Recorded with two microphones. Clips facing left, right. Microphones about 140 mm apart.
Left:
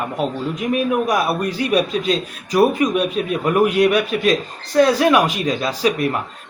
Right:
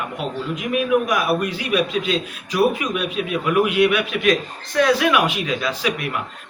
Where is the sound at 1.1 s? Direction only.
35° left (ahead or behind).